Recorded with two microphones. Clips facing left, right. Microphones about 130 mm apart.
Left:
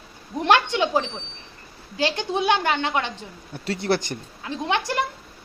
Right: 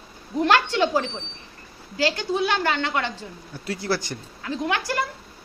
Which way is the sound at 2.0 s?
20° left (ahead or behind).